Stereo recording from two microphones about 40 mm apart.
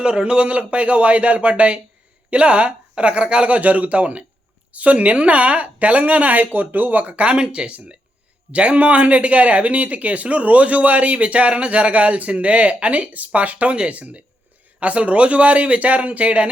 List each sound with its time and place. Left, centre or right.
0.0 s a woman's voice: right
3.6 s speech: right